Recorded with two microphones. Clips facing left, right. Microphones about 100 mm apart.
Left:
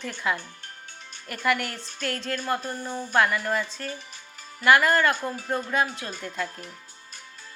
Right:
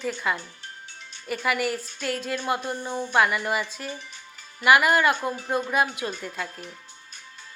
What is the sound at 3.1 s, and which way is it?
Speech, 5° right (ahead or behind).